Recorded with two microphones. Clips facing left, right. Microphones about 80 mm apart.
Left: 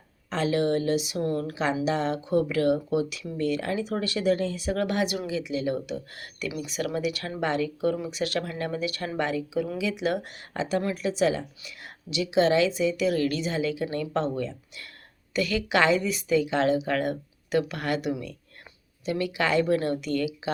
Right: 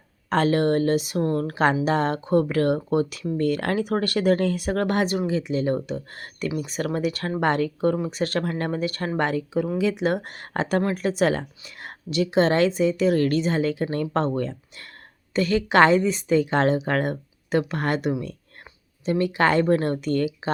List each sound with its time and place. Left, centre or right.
0.3 s speech: right
1.8 s a woman's voice: right